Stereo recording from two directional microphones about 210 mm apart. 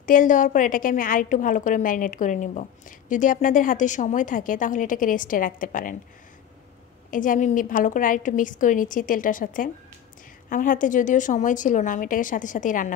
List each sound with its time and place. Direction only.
0.0 s a woman's voice: 40° left (ahead or behind)
7.1 s a woman's voice: 40° left (ahead or behind)